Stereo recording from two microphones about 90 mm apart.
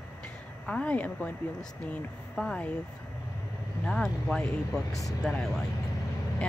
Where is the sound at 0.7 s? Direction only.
15° left (ahead or behind).